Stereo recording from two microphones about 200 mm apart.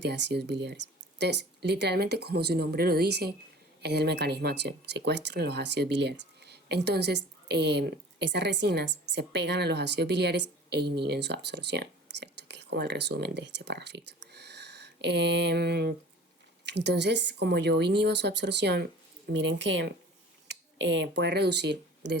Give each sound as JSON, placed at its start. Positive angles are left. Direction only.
{"t": 0.0, "sound": "speech", "side_deg": -60}